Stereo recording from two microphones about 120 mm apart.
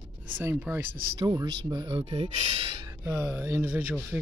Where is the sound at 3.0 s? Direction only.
25° right (ahead or behind).